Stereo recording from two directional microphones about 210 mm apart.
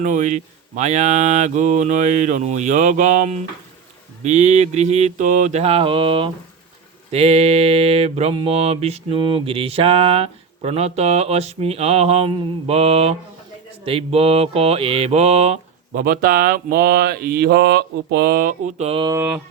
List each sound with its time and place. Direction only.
0.0 s speech: 35° right (ahead or behind)
7.1 s mantra: 30° right (ahead or behind)
16.0 s speech: 45° right (ahead or behind); by 19.4 s 10° right (ahead or behind)